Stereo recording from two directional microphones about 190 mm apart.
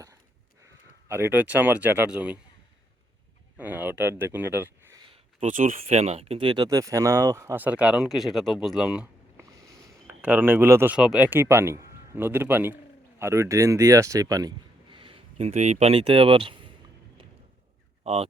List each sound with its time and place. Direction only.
1.0 s speech: 10° right (ahead or behind)
3.6 s speech: 10° right (ahead or behind)
4.9 s speech: 30° right (ahead or behind); by 9.5 s 5° right (ahead or behind)
9.6 s a man's voice: 20° right (ahead or behind)
18.0 s speech: 35° right (ahead or behind)